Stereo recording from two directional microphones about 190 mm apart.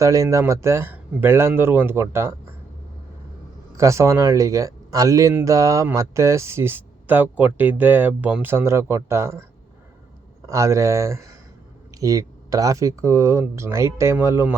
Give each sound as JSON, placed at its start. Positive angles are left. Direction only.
{"t": 0.0, "sound": "speech", "side_deg": -15}
{"t": 3.8, "sound": "speech", "side_deg": -15}
{"t": 10.4, "sound": "speech", "side_deg": -15}